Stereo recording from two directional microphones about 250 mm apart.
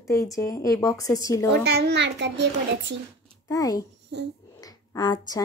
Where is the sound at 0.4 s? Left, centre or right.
Centre.